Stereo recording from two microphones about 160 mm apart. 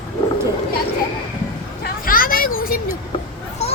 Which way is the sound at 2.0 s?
60° left (ahead or behind).